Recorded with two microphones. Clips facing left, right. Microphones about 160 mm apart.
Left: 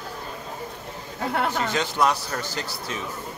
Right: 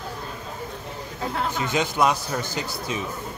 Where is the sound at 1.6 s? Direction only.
15° right (ahead or behind).